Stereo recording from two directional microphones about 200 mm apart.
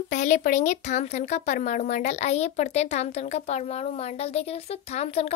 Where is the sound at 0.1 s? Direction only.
40° left (ahead or behind).